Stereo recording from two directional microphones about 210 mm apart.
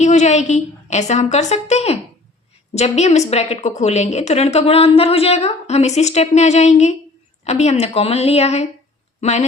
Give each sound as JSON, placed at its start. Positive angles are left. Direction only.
{"t": 0.0, "sound": "a woman's voice", "side_deg": 35}